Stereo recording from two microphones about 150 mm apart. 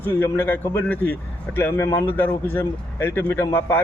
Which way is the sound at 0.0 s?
15° left (ahead or behind).